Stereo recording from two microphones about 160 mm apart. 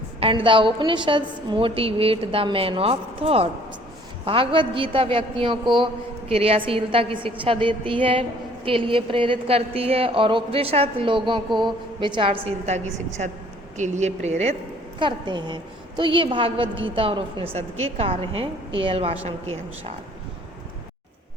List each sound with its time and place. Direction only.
0.2 s a woman's voice: 35° right (ahead or behind)
14.9 s a woman's voice: 30° right (ahead or behind)